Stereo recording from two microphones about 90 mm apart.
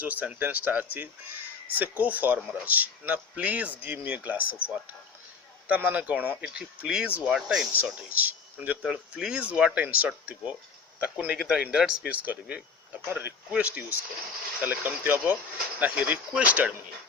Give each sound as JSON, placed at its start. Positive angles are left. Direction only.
{"t": 0.0, "sound": "speech", "side_deg": -20}
{"t": 5.6, "sound": "speech", "side_deg": -20}
{"t": 7.9, "sound": "speech", "side_deg": -15}